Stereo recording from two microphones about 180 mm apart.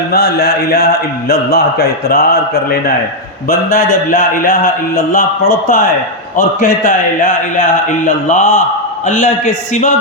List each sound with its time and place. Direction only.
0.1 s a man's voice: 60° left (ahead or behind)